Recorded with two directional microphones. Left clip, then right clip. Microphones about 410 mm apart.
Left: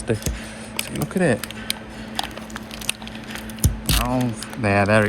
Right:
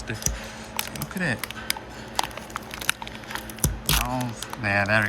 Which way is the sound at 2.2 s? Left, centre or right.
Centre.